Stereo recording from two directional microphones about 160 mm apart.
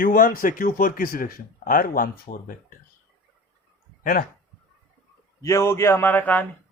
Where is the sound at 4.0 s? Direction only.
60° left (ahead or behind).